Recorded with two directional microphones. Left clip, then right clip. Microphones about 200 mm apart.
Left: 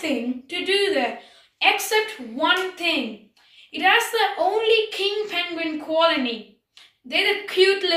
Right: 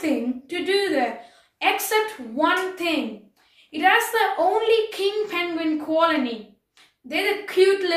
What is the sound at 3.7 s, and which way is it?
A child's voice, 15° right (ahead or behind).